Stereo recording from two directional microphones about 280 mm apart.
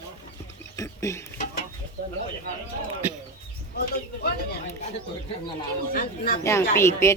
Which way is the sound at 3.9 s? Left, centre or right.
Left.